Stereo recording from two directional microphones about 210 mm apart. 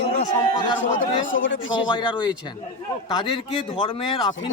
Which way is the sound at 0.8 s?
65° left (ahead or behind).